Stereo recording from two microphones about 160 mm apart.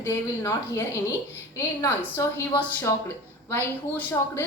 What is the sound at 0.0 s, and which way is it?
Speech, 15° left (ahead or behind).